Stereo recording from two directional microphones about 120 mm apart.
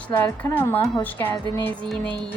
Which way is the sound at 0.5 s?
15° left (ahead or behind).